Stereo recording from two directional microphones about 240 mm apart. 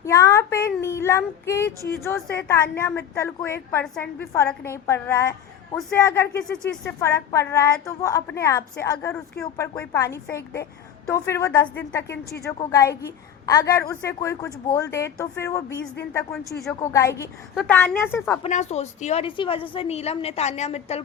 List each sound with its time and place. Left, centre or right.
0.0 s a woman's voice: centre
16.9 s a woman's voice: centre
17.5 s a woman's voice: centre
18.4 s a woman's voice: left